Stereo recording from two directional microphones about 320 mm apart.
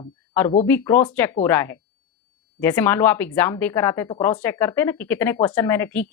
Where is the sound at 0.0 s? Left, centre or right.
Centre.